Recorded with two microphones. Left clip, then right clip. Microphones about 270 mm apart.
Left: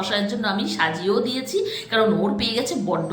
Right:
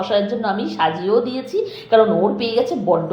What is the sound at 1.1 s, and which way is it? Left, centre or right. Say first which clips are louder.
Speech: right 5 dB; centre.